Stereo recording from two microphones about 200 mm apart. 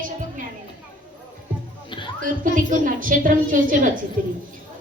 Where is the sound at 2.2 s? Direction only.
40° right (ahead or behind).